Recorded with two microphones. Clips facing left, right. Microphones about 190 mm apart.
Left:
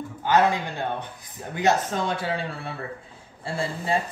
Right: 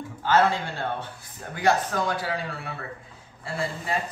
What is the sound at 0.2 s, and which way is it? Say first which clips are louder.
A man's voice: left 1 dB; 15° left (ahead or behind).